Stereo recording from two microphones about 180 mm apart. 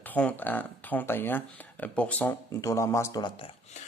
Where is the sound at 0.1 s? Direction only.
10° left (ahead or behind); by 3.5 s 25° left (ahead or behind).